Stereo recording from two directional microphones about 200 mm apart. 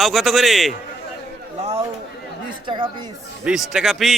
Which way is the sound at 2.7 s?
20° right (ahead or behind).